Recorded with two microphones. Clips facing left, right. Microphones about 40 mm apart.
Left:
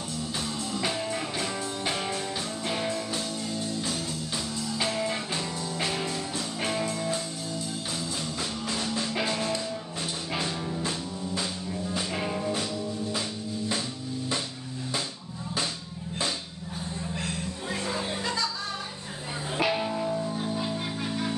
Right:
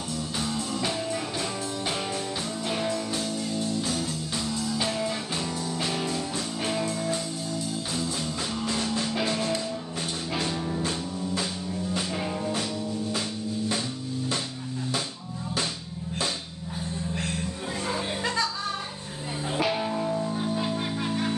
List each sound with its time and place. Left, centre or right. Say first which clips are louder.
0.7 s music: left 2 dB; centre
5.9 s music: right 2 dB; centre
7.9 s music: right 3 dB; centre
9.1 s music: even; centre
10.4 s music: right 4 dB; centre
12.1 s music: even; centre
17.8 s music: right 3 dB; right
19.5 s music: even; centre